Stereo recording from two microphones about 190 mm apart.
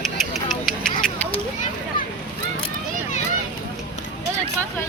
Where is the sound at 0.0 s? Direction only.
Centre (ahead or behind).